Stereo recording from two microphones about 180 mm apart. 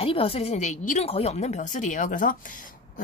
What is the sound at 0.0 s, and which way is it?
A woman's voice, 30° left (ahead or behind).